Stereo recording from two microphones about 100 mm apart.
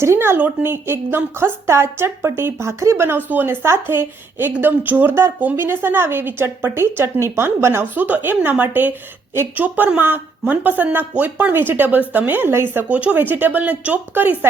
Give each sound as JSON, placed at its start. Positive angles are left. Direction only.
{"t": 0.0, "sound": "a woman's voice", "side_deg": -25}